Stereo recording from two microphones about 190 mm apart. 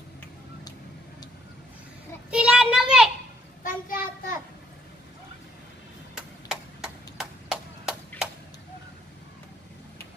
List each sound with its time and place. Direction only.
2.3 s child singing: 5° right (ahead or behind)
3.6 s child singing: 45° left (ahead or behind)
6.1 s chop: 5° right (ahead or behind)